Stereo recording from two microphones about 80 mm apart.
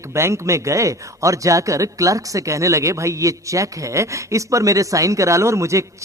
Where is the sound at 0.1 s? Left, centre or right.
Right.